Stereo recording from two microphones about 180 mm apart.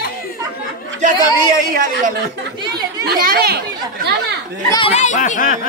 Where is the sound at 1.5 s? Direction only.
50° right (ahead or behind).